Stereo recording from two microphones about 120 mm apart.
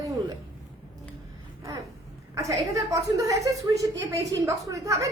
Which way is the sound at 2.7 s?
30° right (ahead or behind).